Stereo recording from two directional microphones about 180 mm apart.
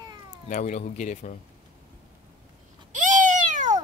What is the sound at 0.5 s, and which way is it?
Speech, 40° left (ahead or behind).